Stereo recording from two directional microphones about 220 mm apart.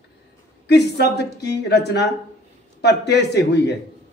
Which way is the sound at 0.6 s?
50° left (ahead or behind).